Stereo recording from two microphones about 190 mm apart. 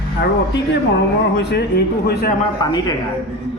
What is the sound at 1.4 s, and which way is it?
Speech, 60° left (ahead or behind).